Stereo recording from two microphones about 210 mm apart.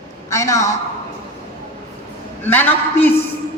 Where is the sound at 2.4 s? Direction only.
10° left (ahead or behind).